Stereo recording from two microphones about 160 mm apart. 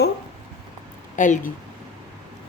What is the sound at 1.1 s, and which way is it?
Speech, 50° left (ahead or behind).